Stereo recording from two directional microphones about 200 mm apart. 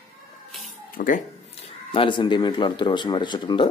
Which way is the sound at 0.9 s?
40° left (ahead or behind).